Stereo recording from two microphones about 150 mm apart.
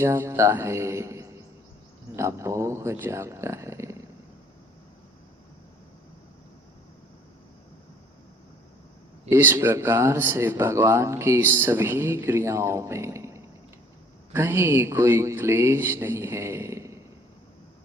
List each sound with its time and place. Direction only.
0.0 s speech: 15° right (ahead or behind)
9.3 s speech: 15° right (ahead or behind)